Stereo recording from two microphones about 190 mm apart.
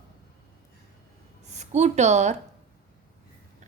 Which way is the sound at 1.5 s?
35° right (ahead or behind).